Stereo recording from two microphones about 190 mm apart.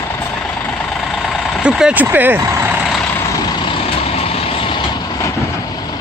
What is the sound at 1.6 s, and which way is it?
Speech, 5° right (ahead or behind).